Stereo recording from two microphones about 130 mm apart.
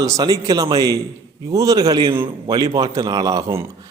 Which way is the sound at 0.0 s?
25° right (ahead or behind).